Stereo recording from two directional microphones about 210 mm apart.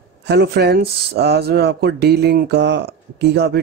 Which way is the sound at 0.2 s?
55° right (ahead or behind).